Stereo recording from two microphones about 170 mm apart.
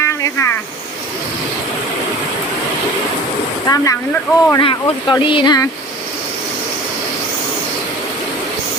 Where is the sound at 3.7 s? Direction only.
30° left (ahead or behind).